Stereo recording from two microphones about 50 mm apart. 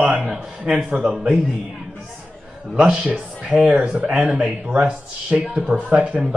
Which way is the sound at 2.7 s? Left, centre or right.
Centre.